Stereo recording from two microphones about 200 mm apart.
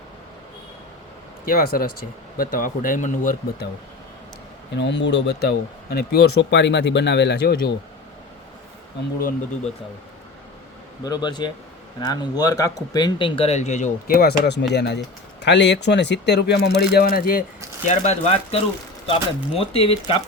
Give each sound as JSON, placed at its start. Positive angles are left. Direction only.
{"t": 1.5, "sound": "speech", "side_deg": 45}
{"t": 4.8, "sound": "speech", "side_deg": 60}
{"t": 11.0, "sound": "speech", "side_deg": 20}
{"t": 17.8, "sound": "speech", "side_deg": 35}